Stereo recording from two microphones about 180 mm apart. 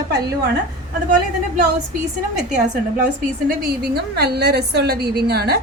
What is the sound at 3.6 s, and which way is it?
A woman's voice, 60° right (ahead or behind).